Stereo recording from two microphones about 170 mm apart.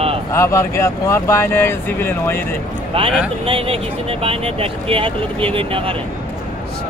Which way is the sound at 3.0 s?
30° right (ahead or behind).